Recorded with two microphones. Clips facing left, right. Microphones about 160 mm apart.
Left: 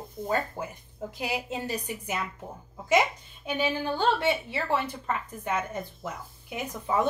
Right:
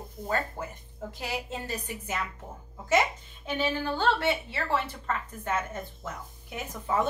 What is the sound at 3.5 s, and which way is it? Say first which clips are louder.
A woman's voice: left 1 dB; 15° left (ahead or behind).